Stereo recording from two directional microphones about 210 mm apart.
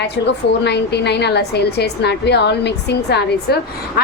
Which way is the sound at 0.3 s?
55° left (ahead or behind).